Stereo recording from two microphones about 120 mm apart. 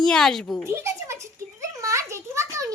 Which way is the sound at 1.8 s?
25° right (ahead or behind).